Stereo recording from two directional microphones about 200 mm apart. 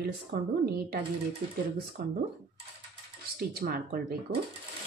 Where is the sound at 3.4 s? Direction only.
50° right (ahead or behind).